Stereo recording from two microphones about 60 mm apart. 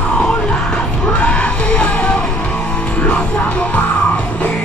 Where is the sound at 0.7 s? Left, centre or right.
Left.